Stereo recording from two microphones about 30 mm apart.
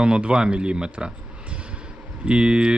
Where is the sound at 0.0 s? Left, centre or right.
Right.